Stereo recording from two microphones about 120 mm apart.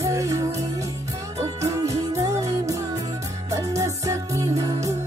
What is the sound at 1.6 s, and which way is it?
Music, 25° right (ahead or behind).